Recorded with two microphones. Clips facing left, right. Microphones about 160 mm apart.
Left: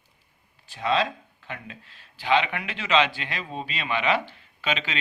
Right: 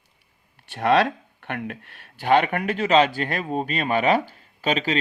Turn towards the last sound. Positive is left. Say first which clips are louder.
# right 6 dB
turn(degrees=-40)  # may be behind; listen again after turning